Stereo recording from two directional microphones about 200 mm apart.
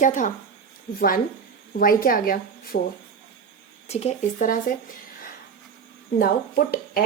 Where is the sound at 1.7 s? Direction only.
45° left (ahead or behind).